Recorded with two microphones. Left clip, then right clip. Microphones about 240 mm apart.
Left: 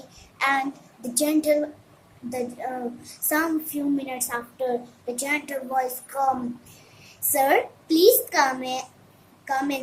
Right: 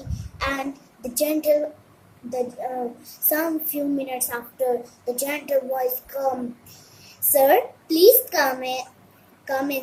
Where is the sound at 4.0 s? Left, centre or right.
Centre.